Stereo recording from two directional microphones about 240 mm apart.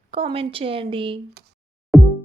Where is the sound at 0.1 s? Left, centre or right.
Right.